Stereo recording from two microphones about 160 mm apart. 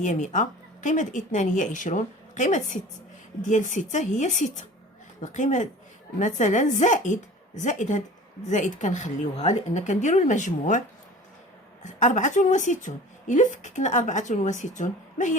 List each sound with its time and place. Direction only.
0.0 s a woman's voice: 50° left (ahead or behind)